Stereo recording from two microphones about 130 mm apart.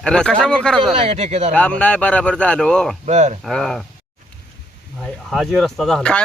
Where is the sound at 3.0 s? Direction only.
60° right (ahead or behind).